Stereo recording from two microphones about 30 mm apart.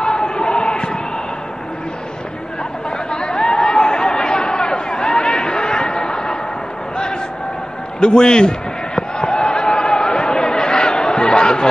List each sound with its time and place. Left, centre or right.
0.0 s basketball bounce: left
3.1 s chatter: left
8.0 s a sound: left